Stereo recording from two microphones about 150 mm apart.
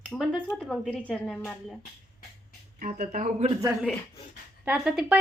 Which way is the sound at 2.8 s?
50° right (ahead or behind).